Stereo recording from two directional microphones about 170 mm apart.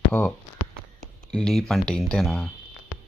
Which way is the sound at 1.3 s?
5° left (ahead or behind).